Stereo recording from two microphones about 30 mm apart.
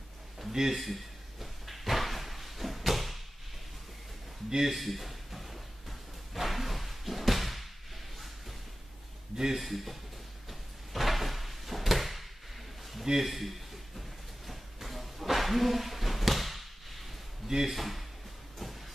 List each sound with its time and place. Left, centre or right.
0.5 s speech: centre
0.7 s slam: centre
4.5 s speech: centre
4.7 s a sound: centre
9.6 s speech: centre
10.5 s drawer open or close: centre
13.0 s speech: centre
13.3 s a sound: centre
17.5 s speech: centre
17.7 s speech: centre
18.6 s vehicle: centre